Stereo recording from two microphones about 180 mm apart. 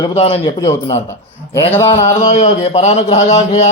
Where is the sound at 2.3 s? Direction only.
40° left (ahead or behind).